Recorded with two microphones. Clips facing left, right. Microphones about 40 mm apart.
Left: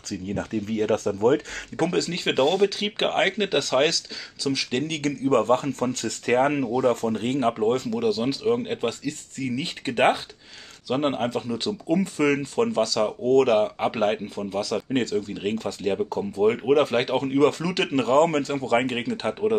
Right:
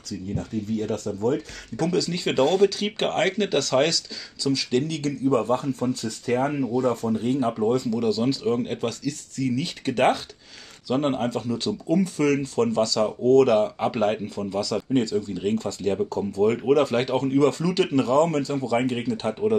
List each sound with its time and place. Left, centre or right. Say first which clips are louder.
0.1 s speech: left 2 dB; left
1.8 s speech: even; left
14.9 s speech: right 1 dB; left